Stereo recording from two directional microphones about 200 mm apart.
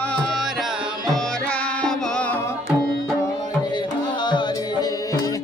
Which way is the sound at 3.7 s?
20° left (ahead or behind).